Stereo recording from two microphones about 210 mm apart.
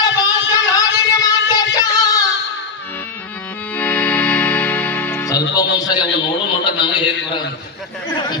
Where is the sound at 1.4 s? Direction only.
15° left (ahead or behind).